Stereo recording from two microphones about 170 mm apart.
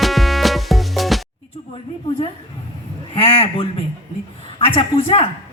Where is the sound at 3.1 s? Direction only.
35° left (ahead or behind).